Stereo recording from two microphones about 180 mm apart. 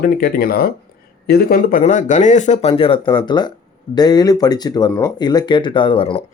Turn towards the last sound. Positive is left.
turn(degrees=30)  # may be behind; listen again after turning